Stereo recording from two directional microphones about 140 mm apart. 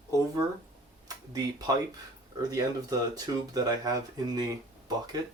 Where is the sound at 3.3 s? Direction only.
25° right (ahead or behind).